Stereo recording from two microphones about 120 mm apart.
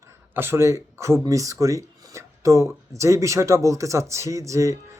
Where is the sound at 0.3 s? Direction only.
20° right (ahead or behind).